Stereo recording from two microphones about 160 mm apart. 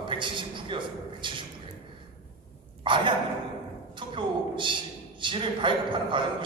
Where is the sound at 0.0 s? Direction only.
30° right (ahead or behind).